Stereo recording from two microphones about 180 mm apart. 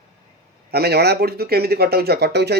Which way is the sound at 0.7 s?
60° right (ahead or behind).